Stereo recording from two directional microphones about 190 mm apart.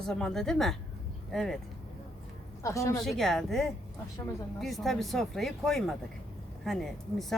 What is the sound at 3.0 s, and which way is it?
Speech, centre (ahead or behind).